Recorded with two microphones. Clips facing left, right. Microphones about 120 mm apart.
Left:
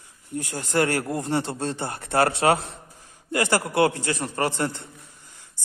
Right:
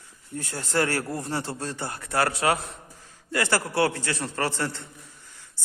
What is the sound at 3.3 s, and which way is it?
Speech, 15° left (ahead or behind).